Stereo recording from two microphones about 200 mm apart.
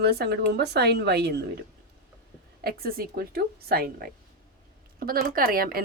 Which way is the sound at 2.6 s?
50° right (ahead or behind).